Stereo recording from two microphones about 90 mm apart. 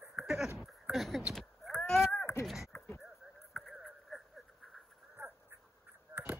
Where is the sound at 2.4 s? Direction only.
5° right (ahead or behind).